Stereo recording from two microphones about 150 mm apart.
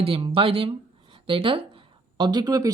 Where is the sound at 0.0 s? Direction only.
40° right (ahead or behind).